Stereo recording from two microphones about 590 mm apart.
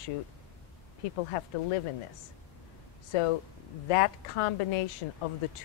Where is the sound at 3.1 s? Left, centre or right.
Left.